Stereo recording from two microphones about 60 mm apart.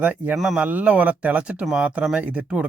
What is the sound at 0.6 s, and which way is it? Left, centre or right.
Speech, right.